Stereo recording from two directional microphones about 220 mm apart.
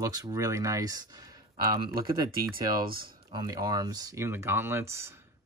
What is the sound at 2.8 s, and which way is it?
Speech, 40° right (ahead or behind).